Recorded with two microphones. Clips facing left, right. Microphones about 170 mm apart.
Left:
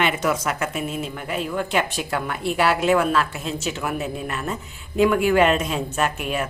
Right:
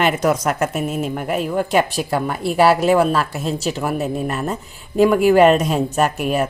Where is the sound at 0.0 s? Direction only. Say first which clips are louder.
Right 5 dB; 40° right (ahead or behind).